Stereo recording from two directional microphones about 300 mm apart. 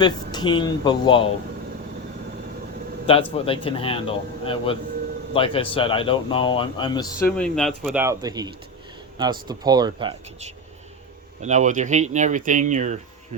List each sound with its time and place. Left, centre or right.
0.0 s speech: centre
3.3 s speech: centre; by 13.0 s right